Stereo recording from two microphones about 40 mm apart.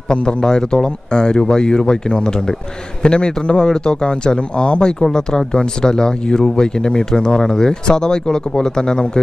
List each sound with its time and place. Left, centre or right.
0.1 s speech: left